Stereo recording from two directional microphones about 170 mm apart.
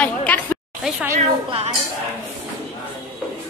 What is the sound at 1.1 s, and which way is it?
Speech, 40° right (ahead or behind).